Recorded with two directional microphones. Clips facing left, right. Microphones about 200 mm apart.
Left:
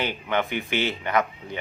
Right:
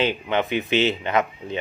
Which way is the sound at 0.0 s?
20° right (ahead or behind).